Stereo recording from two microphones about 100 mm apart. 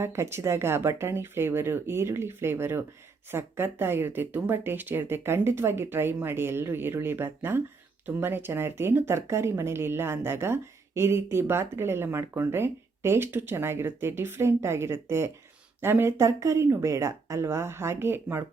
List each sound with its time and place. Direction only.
0.0 s speech: 25° right (ahead or behind)